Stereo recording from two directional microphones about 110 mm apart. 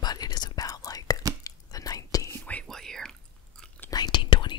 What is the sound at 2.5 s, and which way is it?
Whispering, 10° left (ahead or behind).